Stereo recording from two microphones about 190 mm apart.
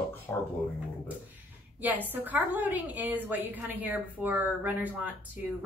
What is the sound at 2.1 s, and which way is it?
A woman's voice, 10° right (ahead or behind).